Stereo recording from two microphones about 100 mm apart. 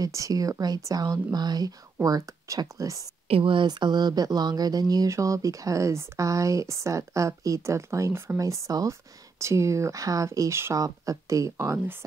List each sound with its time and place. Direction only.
0.0 s speech: 35° right (ahead or behind)
3.3 s speech: 65° right (ahead or behind); by 12.0 s 25° right (ahead or behind)